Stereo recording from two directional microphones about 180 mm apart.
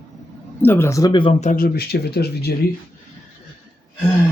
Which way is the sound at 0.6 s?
10° left (ahead or behind).